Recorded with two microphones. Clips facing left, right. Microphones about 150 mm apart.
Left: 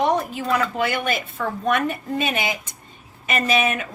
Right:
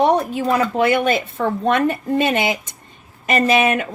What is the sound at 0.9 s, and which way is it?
A woman's voice, 60° right (ahead or behind).